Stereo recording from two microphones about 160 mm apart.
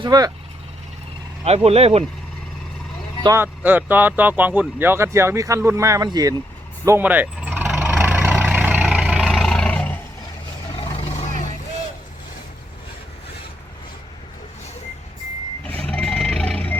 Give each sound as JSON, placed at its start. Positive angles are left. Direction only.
{"t": 0.0, "sound": "speech", "side_deg": -25}
{"t": 1.5, "sound": "speech", "side_deg": -40}
{"t": 3.2, "sound": "speech", "side_deg": -15}
{"t": 6.8, "sound": "vehicle", "side_deg": -15}
{"t": 15.6, "sound": "reversing beeps", "side_deg": 10}